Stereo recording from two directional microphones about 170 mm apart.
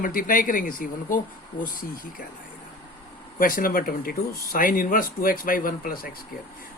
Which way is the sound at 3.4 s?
55° left (ahead or behind).